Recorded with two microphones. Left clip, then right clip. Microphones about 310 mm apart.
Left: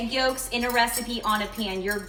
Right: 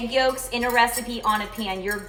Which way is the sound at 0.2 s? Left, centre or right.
Centre.